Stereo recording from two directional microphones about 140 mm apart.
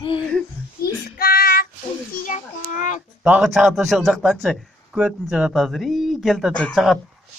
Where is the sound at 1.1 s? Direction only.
90° left.